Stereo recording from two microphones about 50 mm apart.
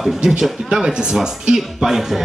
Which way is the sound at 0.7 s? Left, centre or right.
Centre.